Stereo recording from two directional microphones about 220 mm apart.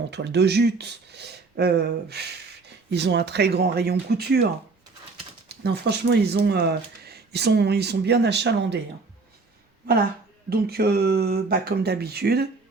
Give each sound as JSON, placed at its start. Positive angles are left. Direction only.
{"t": 0.1, "sound": "speech", "side_deg": -50}
{"t": 5.6, "sound": "speech", "side_deg": -50}
{"t": 10.5, "sound": "speech", "side_deg": -45}